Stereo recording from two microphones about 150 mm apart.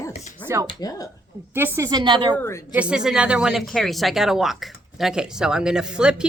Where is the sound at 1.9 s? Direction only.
30° right (ahead or behind).